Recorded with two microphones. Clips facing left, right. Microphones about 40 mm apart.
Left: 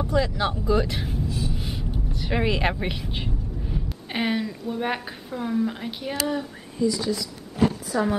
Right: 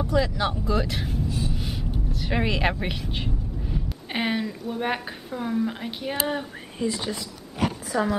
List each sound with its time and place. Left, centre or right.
0.0 s speech: centre
1.5 s vehicle: centre
6.1 s speech: right